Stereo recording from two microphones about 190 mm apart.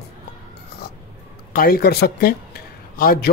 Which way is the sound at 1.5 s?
50° left (ahead or behind).